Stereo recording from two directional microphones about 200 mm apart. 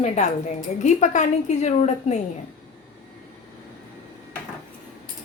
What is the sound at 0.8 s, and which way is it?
A woman's voice, 35° left (ahead or behind).